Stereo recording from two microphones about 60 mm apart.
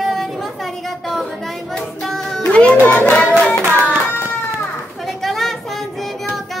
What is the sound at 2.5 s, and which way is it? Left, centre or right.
Speech, centre.